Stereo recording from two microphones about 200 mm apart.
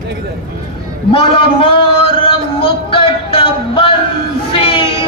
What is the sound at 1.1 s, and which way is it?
Speech, 25° left (ahead or behind).